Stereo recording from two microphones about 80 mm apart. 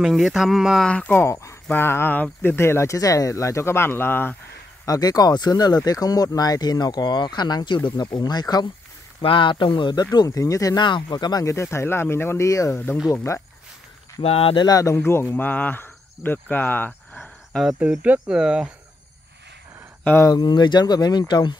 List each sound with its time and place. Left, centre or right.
0.0 s speech: centre
0.8 s speech: centre
1.1 s speech: left
1.7 s speech: left
4.8 s speech: left
9.2 s speech: left
10.8 s speech: left
11.4 s speech: left
14.7 s speech: left
15.0 s speech: left
17.5 s speech: centre
20.3 s speech: left